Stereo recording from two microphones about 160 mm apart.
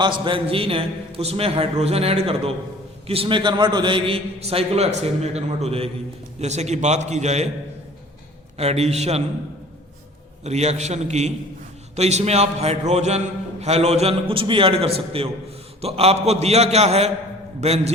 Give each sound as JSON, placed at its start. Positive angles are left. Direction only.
{"t": 0.0, "sound": "a man's voice", "side_deg": -30}
{"t": 8.5, "sound": "a man's voice", "side_deg": -40}
{"t": 10.4, "sound": "a man's voice", "side_deg": -45}